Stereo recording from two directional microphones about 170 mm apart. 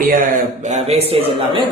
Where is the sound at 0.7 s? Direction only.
40° right (ahead or behind).